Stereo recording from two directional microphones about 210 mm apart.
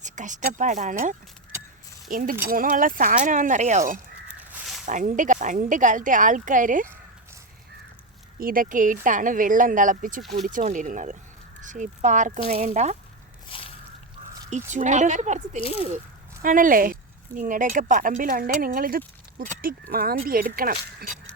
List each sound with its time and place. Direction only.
0.0 s speech: 35° right (ahead or behind)
4.3 s crow: 5° right (ahead or behind)
4.9 s speech: 35° right (ahead or behind)
8.4 s speech: 40° right (ahead or behind)
13.5 s squish: 25° left (ahead or behind)
14.5 s speech: 35° right (ahead or behind)